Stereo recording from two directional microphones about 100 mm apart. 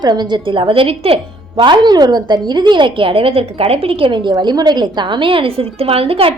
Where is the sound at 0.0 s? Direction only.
45° right (ahead or behind); by 1.6 s 70° right (ahead or behind).